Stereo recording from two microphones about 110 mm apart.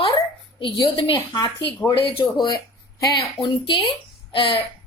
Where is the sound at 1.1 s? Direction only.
40° left (ahead or behind).